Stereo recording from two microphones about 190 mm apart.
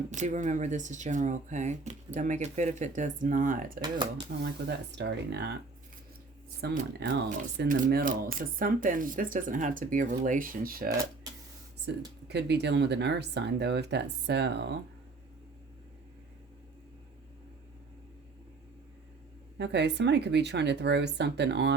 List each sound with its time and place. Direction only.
0.1 s speech: 40° right (ahead or behind)
3.8 s speech: 25° right (ahead or behind)
4.3 s speech: 50° right (ahead or behind)
4.9 s speech: 65° right (ahead or behind)
6.6 s speech: 60° right (ahead or behind)
11.9 s speech: 65° right (ahead or behind)
19.5 s speech: 65° right (ahead or behind)